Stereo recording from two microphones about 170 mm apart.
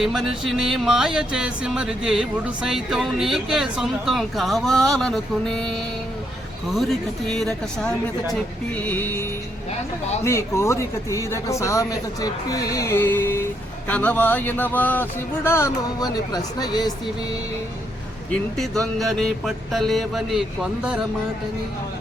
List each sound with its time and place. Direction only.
0.0 s speech: centre (ahead or behind)
10.2 s a man's voice: 15° left (ahead or behind)
18.3 s speech: centre (ahead or behind)